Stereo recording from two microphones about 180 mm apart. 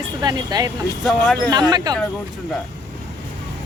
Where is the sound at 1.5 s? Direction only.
25° right (ahead or behind).